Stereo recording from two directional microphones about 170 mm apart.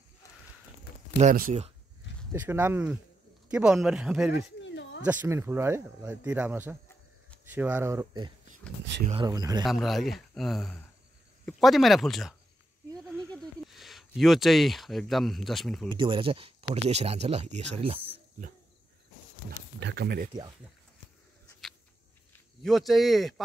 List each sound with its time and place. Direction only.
2.4 s speech: 10° right (ahead or behind)
4.6 s a sound: 90° left
5.0 s a man's voice: 10° right (ahead or behind)
9.7 s speech: centre (ahead or behind)
15.9 s speech: 30° right (ahead or behind)
19.8 s speech: 75° right (ahead or behind)
22.6 s speech: centre (ahead or behind)